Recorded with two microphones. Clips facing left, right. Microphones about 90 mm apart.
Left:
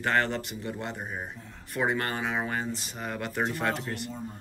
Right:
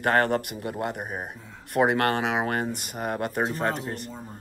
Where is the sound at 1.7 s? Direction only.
60° right (ahead or behind).